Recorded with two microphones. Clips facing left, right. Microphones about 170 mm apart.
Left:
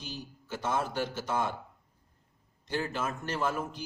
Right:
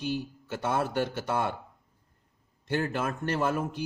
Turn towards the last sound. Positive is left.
turn(degrees=-55)  # may be behind; listen again after turning